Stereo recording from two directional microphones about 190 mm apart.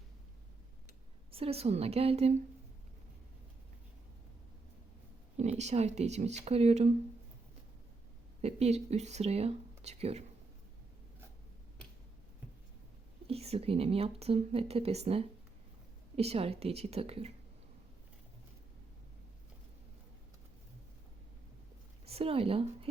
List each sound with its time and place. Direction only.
1.3 s speech: 30° right (ahead or behind)
5.4 s speech: 35° right (ahead or behind)
8.4 s speech: 35° right (ahead or behind)
13.2 s speech: 30° right (ahead or behind)
22.0 s speech: 30° right (ahead or behind)